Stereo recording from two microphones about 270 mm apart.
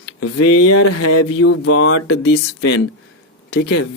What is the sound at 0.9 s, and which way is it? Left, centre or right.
Speech, left.